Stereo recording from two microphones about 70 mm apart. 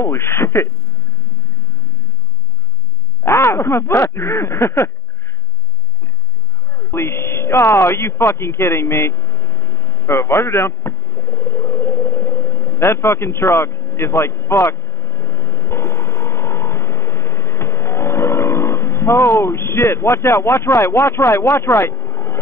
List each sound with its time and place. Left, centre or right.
0.0 s speech: left
3.3 s speech: left
6.7 s a sound: left